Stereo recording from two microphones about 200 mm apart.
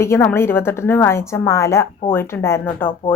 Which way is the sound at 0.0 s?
10° left (ahead or behind).